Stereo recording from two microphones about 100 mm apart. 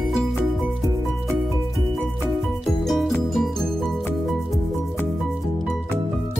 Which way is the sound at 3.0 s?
Centre (ahead or behind).